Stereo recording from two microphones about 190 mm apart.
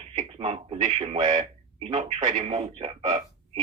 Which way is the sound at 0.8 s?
40° right (ahead or behind).